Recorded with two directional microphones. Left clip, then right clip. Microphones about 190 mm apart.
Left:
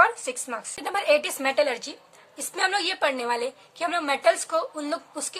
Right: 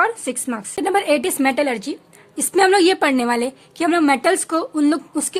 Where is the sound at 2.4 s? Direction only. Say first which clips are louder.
Right 11 dB; 45° right (ahead or behind).